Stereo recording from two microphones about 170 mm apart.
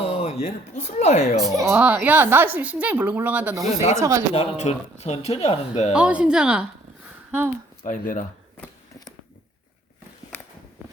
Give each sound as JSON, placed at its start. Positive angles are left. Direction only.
{"t": 0.1, "sound": "speech", "side_deg": 40}
{"t": 1.5, "sound": "speech", "side_deg": -15}
{"t": 4.4, "sound": "speech", "side_deg": 40}
{"t": 5.9, "sound": "speech", "side_deg": -5}
{"t": 7.9, "sound": "speech", "side_deg": 50}